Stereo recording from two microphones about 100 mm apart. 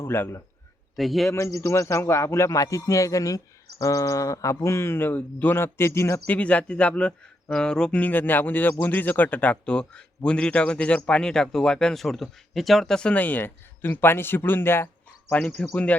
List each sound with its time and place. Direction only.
0.0 s a man's voice: 25° left (ahead or behind)
0.9 s a man's voice: centre (ahead or behind)
1.3 s speech: 30° left (ahead or behind)
6.2 s a man's voice: 15° left (ahead or behind)